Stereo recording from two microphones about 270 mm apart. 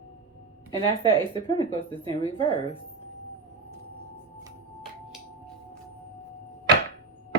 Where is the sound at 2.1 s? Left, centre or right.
Centre.